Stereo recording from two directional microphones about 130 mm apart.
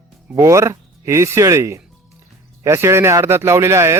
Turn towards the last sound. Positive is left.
turn(degrees=-20)  # may be behind; listen again after turning